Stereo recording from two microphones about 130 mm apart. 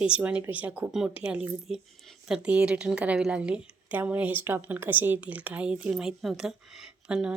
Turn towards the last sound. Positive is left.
turn(degrees=-10)  # may be behind; listen again after turning